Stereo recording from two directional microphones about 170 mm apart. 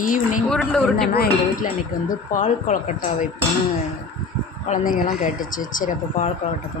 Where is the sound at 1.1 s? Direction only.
65° left (ahead or behind).